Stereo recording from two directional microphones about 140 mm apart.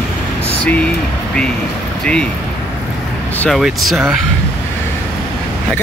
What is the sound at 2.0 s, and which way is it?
Speech, 5° left (ahead or behind).